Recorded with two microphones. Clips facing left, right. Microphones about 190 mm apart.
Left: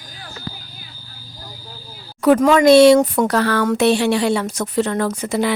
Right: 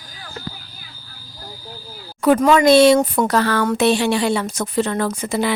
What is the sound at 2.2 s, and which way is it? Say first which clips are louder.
Speech: left 1 dB; 80° left.